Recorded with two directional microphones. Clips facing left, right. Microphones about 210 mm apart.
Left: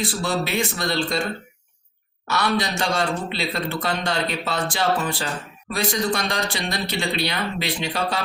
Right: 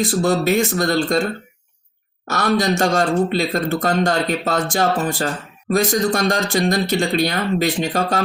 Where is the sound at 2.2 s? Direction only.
45° right (ahead or behind).